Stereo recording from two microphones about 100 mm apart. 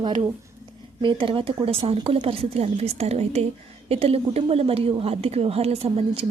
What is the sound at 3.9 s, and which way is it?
A woman's voice, 80° right.